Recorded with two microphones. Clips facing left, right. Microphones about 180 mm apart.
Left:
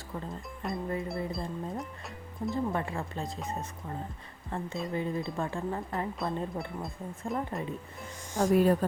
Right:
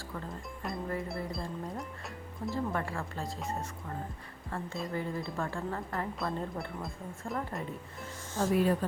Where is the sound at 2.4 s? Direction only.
20° left (ahead or behind).